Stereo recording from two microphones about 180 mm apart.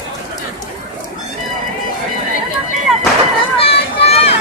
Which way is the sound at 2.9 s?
Centre (ahead or behind).